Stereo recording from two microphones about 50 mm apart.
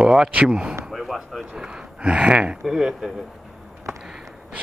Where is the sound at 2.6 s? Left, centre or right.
Centre.